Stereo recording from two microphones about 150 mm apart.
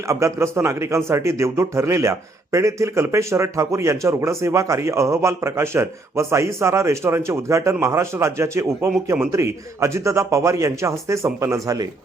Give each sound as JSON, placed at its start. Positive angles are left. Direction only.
{"t": 0.1, "sound": "a man's voice", "side_deg": -20}